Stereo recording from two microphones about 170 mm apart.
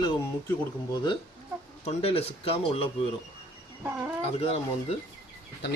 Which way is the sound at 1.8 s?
35° left (ahead or behind).